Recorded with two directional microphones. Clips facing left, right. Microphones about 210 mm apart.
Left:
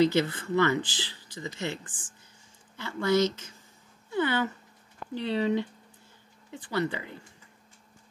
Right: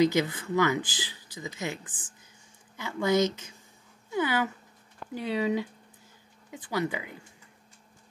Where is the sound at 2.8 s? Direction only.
15° right (ahead or behind).